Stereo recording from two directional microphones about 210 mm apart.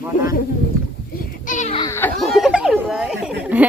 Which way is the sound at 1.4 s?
40° left (ahead or behind).